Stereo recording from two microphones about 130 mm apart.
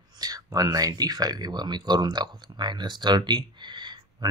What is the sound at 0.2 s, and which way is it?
Speech, 30° right (ahead or behind).